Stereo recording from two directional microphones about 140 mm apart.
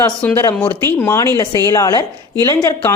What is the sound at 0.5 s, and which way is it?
A woman's voice, 15° left (ahead or behind).